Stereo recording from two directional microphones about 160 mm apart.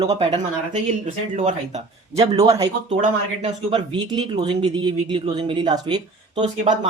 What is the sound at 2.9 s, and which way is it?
Speech, 50° right (ahead or behind).